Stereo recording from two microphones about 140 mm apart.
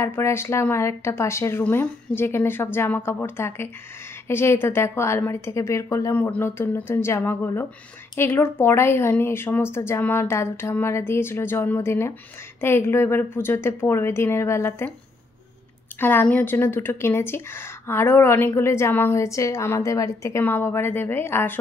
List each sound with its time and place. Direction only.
0.0 s speech: 20° left (ahead or behind)
16.0 s speech: 15° left (ahead or behind)